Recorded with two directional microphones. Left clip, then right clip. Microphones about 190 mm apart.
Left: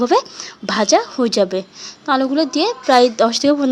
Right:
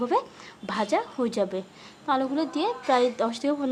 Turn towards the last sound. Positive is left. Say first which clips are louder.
# left 12 dB
turn(degrees=35)  # may be behind; listen again after turning